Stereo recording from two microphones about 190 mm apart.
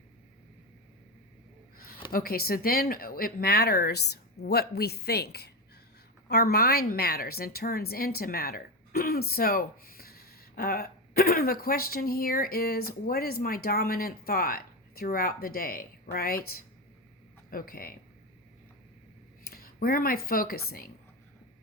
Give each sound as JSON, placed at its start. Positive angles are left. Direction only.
{"t": 2.1, "sound": "a woman's voice", "side_deg": 50}
{"t": 19.5, "sound": "a sound", "side_deg": 50}
{"t": 20.2, "sound": "a woman's voice", "side_deg": 50}